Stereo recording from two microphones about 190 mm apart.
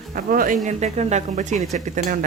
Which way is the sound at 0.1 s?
50° right (ahead or behind).